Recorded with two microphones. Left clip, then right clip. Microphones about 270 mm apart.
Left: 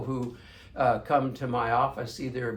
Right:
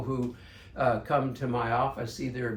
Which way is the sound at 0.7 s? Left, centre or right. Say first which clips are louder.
Left 2 dB; centre.